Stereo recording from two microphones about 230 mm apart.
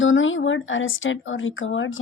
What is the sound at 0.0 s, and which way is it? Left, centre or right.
A woman's voice, left.